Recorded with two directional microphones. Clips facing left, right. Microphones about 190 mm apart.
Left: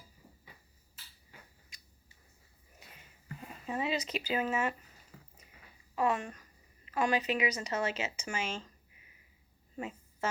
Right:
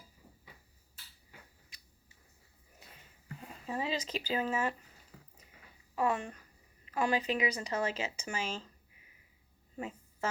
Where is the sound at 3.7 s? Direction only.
35° right (ahead or behind).